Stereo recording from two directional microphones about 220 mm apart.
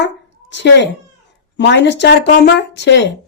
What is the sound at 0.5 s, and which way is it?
Speech, 55° left (ahead or behind).